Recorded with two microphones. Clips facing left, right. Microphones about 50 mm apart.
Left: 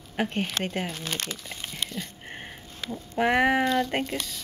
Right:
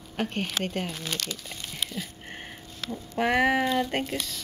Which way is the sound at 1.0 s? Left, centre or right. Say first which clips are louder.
Left 1 dB; left.